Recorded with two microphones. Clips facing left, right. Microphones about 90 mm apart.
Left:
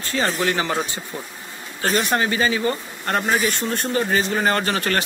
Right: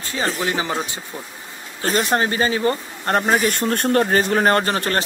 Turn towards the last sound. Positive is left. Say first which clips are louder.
# right 3 dB
turn(degrees=-35)  # may be behind; listen again after turning